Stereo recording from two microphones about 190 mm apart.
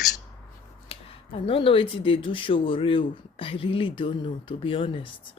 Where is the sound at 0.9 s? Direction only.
30° left (ahead or behind).